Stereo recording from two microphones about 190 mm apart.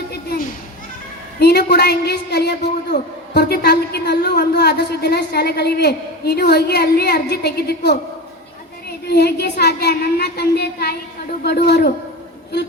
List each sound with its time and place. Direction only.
0.1 s children playing: 55° left (ahead or behind)
1.4 s a woman's voice: 60° left (ahead or behind)
9.0 s a woman's voice: 60° left (ahead or behind)